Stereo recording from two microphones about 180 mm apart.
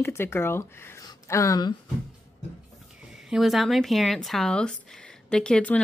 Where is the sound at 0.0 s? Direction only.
15° left (ahead or behind).